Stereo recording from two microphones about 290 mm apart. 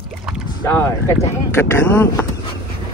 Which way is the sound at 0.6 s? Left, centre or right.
Centre.